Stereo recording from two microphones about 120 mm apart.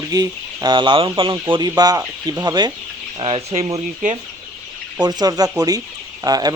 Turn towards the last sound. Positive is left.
turn(degrees=-30)  # may be behind; listen again after turning